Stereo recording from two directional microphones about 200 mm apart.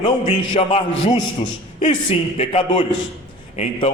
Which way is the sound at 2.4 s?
30° left (ahead or behind).